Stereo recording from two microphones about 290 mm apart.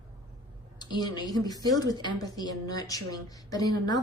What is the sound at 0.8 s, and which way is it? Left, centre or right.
A woman's voice, centre.